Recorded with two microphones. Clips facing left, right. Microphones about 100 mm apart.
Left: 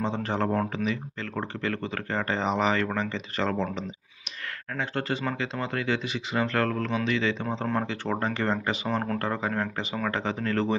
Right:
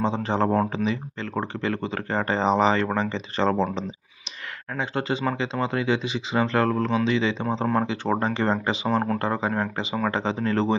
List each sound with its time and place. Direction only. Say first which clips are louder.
0.0 s speech: right 4 dB; 20° right (ahead or behind)
4.7 s speech: right 3 dB; 20° right (ahead or behind)